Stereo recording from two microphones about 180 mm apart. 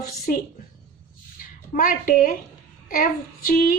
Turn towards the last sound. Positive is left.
turn(degrees=50)  # may be behind; listen again after turning